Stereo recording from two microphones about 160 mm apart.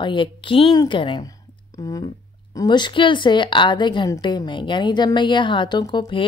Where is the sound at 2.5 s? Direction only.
25° left (ahead or behind).